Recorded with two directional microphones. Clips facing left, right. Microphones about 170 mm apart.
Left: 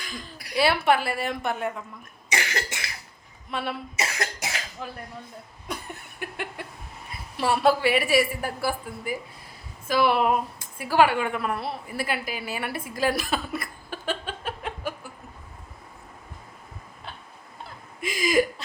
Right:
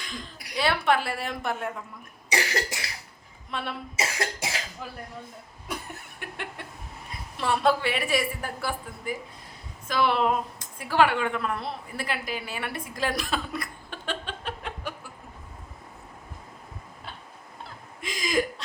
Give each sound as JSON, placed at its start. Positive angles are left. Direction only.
{"t": 0.5, "sound": "a woman's voice", "side_deg": 5}
{"t": 2.3, "sound": "cough", "side_deg": -35}
{"t": 3.5, "sound": "a woman's voice", "side_deg": 5}
{"t": 3.9, "sound": "cough", "side_deg": -30}
{"t": 6.1, "sound": "a woman's voice", "side_deg": 0}
{"t": 18.0, "sound": "chuckle", "side_deg": 5}